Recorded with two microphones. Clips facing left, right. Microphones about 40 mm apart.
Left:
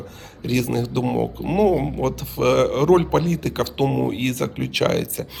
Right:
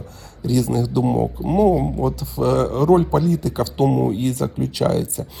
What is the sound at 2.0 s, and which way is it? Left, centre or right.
Speech, left.